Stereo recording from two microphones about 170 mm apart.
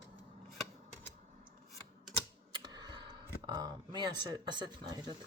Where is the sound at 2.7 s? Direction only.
25° right (ahead or behind).